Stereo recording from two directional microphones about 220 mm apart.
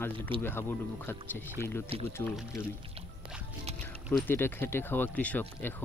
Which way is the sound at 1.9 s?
25° right (ahead or behind).